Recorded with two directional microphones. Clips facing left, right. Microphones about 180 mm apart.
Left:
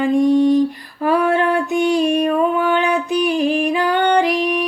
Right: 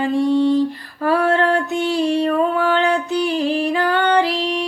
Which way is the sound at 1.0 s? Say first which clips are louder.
Left 1 dB; 15° left (ahead or behind).